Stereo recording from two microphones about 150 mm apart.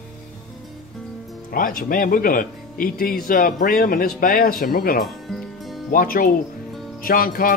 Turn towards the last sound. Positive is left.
turn(degrees=70)  # may be behind; listen again after turning